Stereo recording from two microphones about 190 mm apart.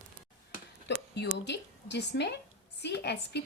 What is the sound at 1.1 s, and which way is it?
A woman's voice, 65° left (ahead or behind).